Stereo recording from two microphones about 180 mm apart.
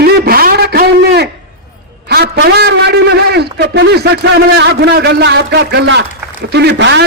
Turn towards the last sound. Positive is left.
turn(degrees=-75)  # may be behind; listen again after turning